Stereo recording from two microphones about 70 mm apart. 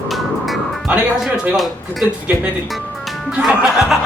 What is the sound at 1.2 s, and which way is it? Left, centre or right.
Speech, centre.